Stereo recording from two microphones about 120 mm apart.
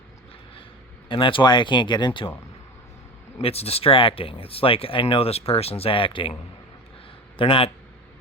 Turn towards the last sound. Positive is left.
turn(degrees=50)  # may be behind; listen again after turning